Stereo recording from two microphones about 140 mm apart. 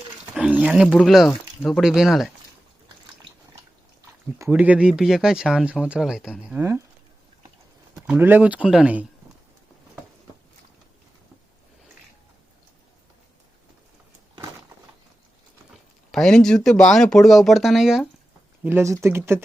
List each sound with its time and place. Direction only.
0.3 s a sound: 10° right (ahead or behind)
0.9 s speech: 5° left (ahead or behind)
4.4 s speech: 15° right (ahead or behind)
6.5 s speech: 20° right (ahead or behind)
8.0 s speech: 15° right (ahead or behind)
16.1 s speech: 5° left (ahead or behind)
18.6 s speech: 15° right (ahead or behind)